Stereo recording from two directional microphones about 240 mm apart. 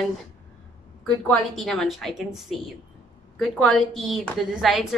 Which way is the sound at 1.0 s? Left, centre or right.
Centre.